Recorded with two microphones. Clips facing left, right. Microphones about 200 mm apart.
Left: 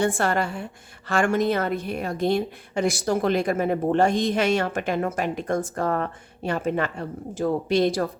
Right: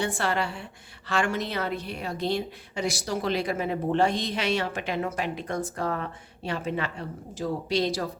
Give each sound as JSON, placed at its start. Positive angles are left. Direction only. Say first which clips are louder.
{"t": 0.0, "sound": "a woman's voice", "louder": "left 5 dB", "side_deg": 50}